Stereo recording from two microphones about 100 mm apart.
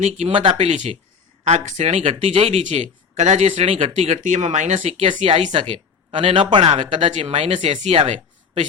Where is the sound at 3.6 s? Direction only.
75° right (ahead or behind); by 8.1 s 90° right.